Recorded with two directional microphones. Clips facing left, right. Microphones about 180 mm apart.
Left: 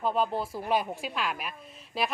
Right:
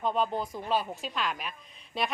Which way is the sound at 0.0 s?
5° left (ahead or behind).